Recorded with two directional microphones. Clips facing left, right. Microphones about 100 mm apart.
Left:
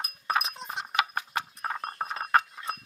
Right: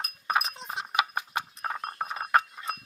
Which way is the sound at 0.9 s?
15° right (ahead or behind).